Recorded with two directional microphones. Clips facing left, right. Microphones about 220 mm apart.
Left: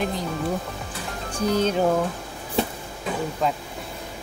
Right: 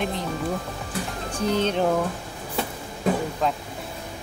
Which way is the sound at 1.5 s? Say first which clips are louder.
Left 1 dB; 5° left (ahead or behind).